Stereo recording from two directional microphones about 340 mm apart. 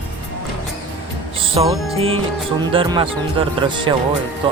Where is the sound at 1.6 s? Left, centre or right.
Centre.